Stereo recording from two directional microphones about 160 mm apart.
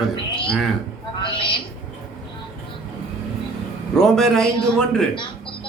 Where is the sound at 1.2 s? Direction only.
30° left (ahead or behind).